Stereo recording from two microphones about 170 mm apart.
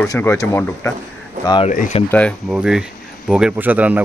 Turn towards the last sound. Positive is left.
turn(degrees=-10)  # may be behind; listen again after turning